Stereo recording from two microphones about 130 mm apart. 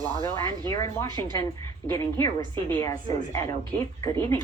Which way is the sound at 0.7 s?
25° left (ahead or behind).